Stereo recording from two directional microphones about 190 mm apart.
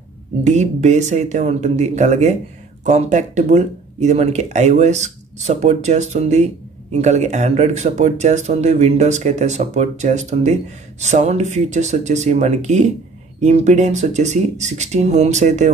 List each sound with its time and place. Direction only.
0.4 s speech: 35° right (ahead or behind)